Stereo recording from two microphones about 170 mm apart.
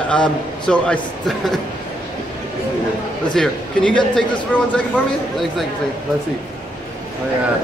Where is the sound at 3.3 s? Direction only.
5° left (ahead or behind).